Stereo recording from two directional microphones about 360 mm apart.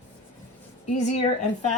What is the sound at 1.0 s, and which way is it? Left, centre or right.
Speech, centre.